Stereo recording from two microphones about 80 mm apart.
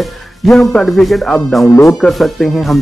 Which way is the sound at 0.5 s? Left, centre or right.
Centre.